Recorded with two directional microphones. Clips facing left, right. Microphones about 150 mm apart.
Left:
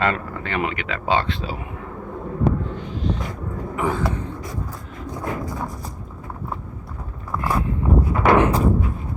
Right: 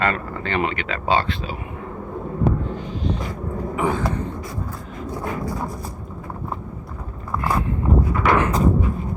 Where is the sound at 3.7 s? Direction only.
15° right (ahead or behind).